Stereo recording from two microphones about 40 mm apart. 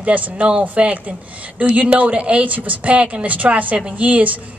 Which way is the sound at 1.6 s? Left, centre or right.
Right.